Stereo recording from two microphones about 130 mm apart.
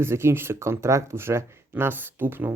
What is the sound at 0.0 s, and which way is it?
Speech, 20° right (ahead or behind).